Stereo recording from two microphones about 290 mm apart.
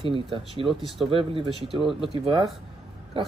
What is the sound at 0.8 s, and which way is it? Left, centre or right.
Speech, centre.